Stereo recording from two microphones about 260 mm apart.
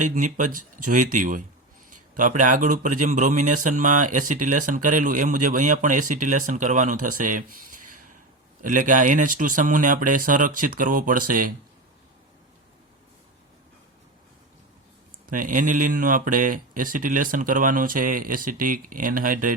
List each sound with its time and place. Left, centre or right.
0.0 s speech: right
7.2 s a sound: right
8.6 s speech: right
15.3 s speech: right